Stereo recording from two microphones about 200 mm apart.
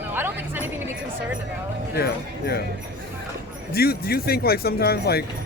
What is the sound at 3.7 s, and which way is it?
Speech, 50° left (ahead or behind).